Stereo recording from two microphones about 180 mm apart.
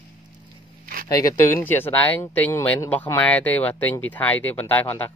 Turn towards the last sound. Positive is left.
turn(degrees=10)  # may be behind; listen again after turning